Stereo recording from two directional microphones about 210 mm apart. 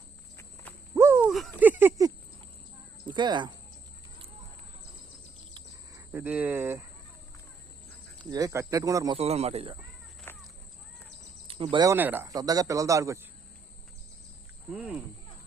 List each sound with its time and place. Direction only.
0.9 s a sound: 10° right (ahead or behind)
1.2 s a sound: 5° left (ahead or behind); by 2.1 s 15° right (ahead or behind)
3.1 s speech: 20° right (ahead or behind)
6.1 s speech: 10° right (ahead or behind)
8.2 s speech: 15° right (ahead or behind)
9.1 s speech: 30° right (ahead or behind)
10.3 s a sound: 10° left (ahead or behind)
11.4 s speech: 25° right (ahead or behind)
14.7 s speech: 5° right (ahead or behind)